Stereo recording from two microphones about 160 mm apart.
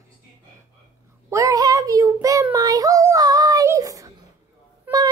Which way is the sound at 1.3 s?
20° right (ahead or behind).